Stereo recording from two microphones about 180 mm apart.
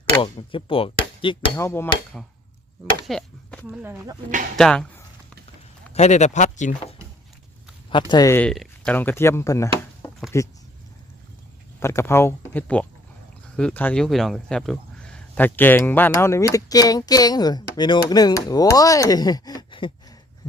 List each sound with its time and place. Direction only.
0.0 s speech: 30° left (ahead or behind)
1.5 s speech: 15° left (ahead or behind)
3.1 s chop: 5° left (ahead or behind)
3.7 s speech: 5° right (ahead or behind)
5.9 s speech: 40° left (ahead or behind)
7.9 s speech: 25° left (ahead or behind)
11.8 s speech: 15° left (ahead or behind)
20.4 s a sound: 25° left (ahead or behind)